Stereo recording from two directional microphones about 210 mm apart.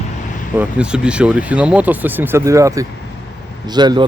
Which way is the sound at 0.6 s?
5° right (ahead or behind).